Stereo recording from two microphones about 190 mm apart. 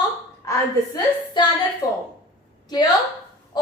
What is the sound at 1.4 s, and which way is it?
Speech, 25° left (ahead or behind).